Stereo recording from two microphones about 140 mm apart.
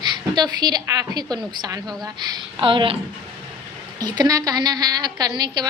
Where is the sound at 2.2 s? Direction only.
35° right (ahead or behind).